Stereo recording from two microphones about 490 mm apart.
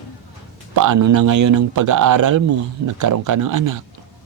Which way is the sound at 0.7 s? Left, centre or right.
Right.